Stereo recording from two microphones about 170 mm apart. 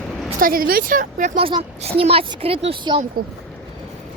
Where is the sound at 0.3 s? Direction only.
55° right (ahead or behind).